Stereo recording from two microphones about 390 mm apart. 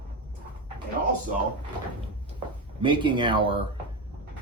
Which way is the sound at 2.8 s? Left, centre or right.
Centre.